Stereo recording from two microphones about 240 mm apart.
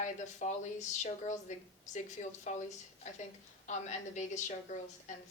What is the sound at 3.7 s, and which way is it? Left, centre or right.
Speech, left.